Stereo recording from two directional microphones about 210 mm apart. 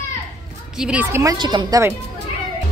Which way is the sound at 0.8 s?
5° right (ahead or behind).